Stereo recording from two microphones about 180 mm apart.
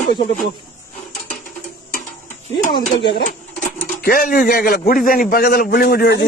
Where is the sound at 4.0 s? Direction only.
55° left (ahead or behind).